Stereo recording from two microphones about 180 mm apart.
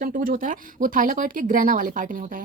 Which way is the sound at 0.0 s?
50° right (ahead or behind).